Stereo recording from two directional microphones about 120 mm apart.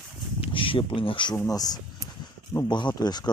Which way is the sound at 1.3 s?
30° left (ahead or behind).